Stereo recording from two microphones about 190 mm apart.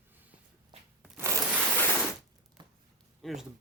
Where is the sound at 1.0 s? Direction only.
5° right (ahead or behind).